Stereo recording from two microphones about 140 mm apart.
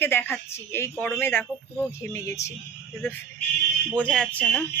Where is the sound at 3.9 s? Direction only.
5° left (ahead or behind).